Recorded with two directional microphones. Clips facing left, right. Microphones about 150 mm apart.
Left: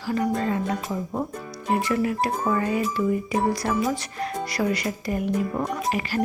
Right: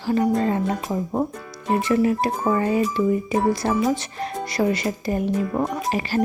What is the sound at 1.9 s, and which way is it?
Music, 25° right (ahead or behind).